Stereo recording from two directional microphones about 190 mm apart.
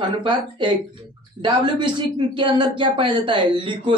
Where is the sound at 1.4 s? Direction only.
25° right (ahead or behind).